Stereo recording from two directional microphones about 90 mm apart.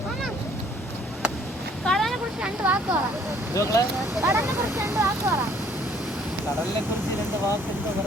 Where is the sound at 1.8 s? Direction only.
5° left (ahead or behind).